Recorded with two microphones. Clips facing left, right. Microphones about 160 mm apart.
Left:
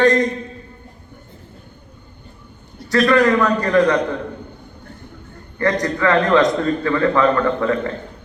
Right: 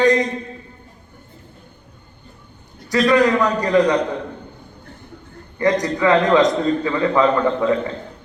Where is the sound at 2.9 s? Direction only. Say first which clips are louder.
Left 1 dB; 15° right (ahead or behind).